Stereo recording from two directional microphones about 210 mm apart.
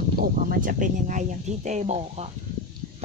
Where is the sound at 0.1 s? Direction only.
45° right (ahead or behind).